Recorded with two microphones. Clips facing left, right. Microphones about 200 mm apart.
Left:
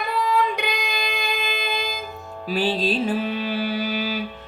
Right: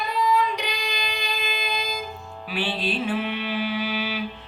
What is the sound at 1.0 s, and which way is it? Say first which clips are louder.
Music: left 3 dB; 50° left (ahead or behind).